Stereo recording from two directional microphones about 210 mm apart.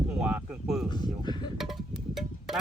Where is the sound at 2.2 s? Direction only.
Centre (ahead or behind).